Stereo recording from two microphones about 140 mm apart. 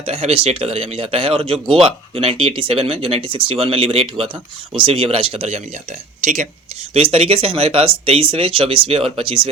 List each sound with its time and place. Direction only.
0.0 s speech: 45° right (ahead or behind)
6.9 s speech: 45° right (ahead or behind)